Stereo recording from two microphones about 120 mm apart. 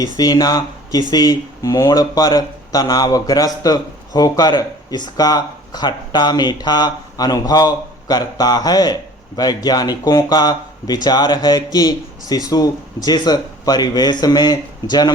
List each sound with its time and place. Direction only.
0.0 s speech: 30° left (ahead or behind)